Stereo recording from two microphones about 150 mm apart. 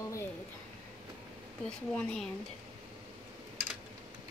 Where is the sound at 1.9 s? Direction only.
5° left (ahead or behind).